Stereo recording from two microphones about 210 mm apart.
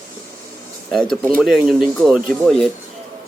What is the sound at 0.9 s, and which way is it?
A man's voice, centre (ahead or behind).